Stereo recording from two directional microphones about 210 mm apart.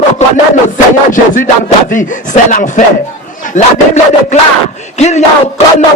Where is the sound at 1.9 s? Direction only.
40° left (ahead or behind).